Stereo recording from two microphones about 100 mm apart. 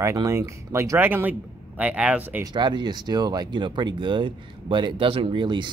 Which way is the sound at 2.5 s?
45° right (ahead or behind).